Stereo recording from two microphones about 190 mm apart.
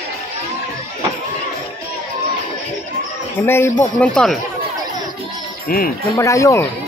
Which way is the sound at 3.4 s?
10° left (ahead or behind).